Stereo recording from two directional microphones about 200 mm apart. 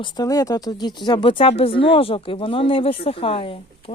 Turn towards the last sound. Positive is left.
turn(degrees=25)  # may be behind; listen again after turning